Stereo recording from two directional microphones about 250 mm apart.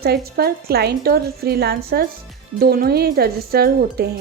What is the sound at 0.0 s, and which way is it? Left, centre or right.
A woman's voice, right.